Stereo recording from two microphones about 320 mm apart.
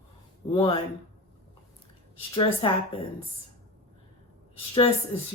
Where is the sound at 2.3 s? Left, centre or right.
Centre.